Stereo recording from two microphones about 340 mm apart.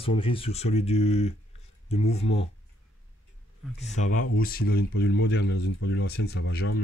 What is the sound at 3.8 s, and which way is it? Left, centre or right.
Speech, left.